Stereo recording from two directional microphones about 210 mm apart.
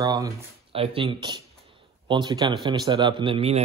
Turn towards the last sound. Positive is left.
turn(degrees=-25)  # may be behind; listen again after turning